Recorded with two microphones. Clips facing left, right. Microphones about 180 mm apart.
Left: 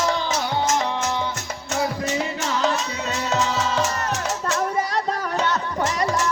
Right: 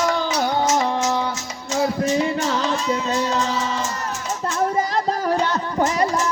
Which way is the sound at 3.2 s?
75° left (ahead or behind).